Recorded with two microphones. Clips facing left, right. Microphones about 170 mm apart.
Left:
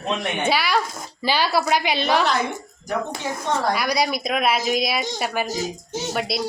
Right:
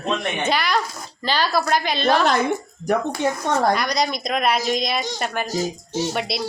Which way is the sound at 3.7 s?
5° left (ahead or behind).